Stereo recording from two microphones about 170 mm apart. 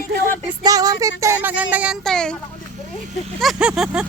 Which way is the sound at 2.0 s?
5° left (ahead or behind).